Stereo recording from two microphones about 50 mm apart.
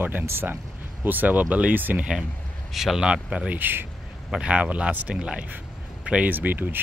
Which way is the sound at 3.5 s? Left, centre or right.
Right.